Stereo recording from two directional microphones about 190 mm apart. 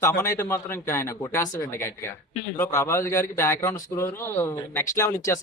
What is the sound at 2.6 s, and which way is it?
A man's voice, 15° left (ahead or behind).